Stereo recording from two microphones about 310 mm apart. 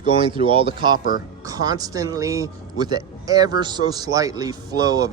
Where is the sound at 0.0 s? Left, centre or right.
Centre.